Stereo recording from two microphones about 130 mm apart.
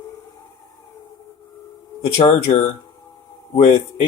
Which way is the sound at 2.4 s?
50° left (ahead or behind).